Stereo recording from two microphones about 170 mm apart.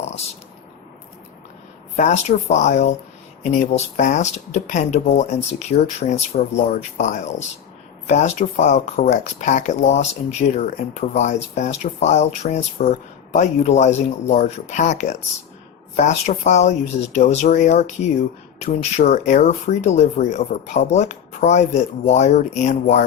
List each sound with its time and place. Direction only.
2.0 s speech: 45° left (ahead or behind)